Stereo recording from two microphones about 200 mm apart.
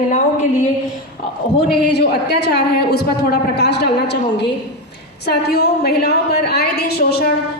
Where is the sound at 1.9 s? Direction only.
55° left (ahead or behind).